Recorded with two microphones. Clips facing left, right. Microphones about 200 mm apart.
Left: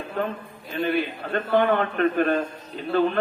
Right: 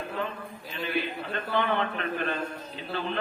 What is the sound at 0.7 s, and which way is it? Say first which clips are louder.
A man's voice: left 7 dB; 55° left (ahead or behind).